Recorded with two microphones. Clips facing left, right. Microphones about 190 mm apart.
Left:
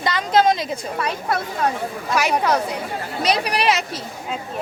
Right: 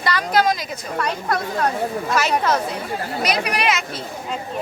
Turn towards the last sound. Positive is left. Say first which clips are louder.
# left 1 dB
turn(degrees=35)  # may be behind; listen again after turning